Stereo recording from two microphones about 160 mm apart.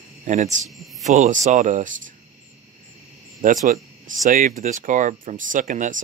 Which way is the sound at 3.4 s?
55° right (ahead or behind).